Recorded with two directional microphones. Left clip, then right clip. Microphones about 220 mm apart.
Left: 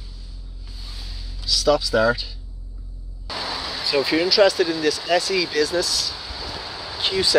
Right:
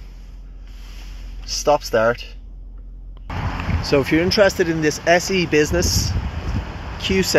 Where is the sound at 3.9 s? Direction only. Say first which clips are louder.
Right 2 dB; 5° right (ahead or behind).